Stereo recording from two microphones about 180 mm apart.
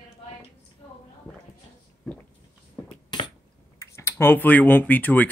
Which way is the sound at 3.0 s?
25° left (ahead or behind).